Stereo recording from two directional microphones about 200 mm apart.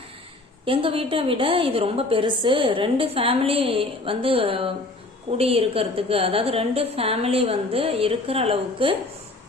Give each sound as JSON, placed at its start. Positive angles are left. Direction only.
{"t": 0.6, "sound": "a woman's voice", "side_deg": -25}